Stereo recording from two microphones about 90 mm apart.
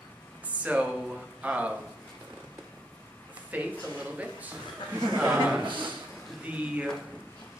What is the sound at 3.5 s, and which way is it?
Speech, 15° right (ahead or behind).